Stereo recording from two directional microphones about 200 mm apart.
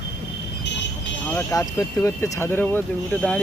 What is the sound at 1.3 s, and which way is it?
Speech, 15° left (ahead or behind).